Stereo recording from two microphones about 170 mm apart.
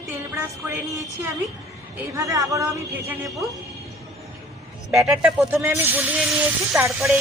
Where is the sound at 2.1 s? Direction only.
20° right (ahead or behind).